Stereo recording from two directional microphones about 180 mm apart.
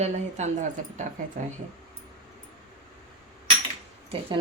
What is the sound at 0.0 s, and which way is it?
Speech, 40° right (ahead or behind).